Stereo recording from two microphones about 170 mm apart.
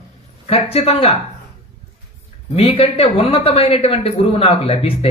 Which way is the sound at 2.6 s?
35° left (ahead or behind).